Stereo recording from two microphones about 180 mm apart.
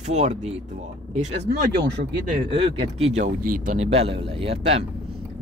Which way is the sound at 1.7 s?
70° right (ahead or behind).